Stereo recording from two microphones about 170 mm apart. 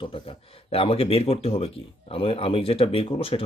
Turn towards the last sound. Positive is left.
turn(degrees=35)  # may be behind; listen again after turning